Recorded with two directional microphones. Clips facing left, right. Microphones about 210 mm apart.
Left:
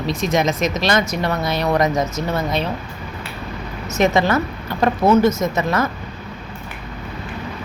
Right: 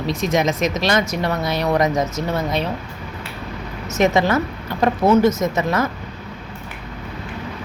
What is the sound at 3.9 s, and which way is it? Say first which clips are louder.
Speech: even; 20° right (ahead or behind).